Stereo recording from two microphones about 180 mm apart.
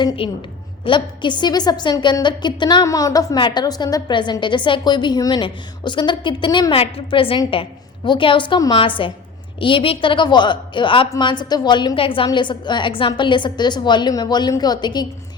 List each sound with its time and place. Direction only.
0.2 s a woman's voice: 30° left (ahead or behind)